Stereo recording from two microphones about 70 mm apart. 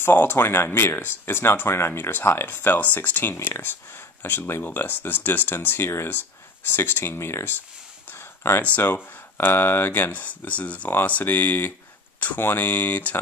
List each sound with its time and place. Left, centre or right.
0.0 s speech: left
5.9 s speech: left
8.1 s a sound: left
8.7 s speech: left